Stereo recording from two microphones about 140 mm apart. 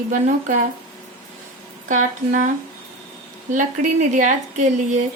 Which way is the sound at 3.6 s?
65° right (ahead or behind).